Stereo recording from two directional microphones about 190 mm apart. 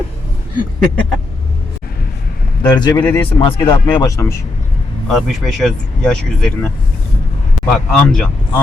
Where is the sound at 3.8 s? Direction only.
15° left (ahead or behind).